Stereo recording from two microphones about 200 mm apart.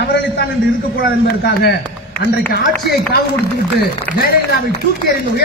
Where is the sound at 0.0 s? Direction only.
60° left (ahead or behind).